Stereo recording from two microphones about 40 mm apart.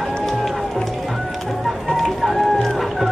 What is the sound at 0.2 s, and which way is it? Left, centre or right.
Music, centre.